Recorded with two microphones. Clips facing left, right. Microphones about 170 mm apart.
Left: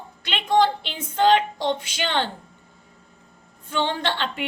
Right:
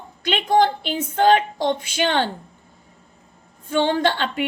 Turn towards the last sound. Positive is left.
turn(degrees=-50)  # may be behind; listen again after turning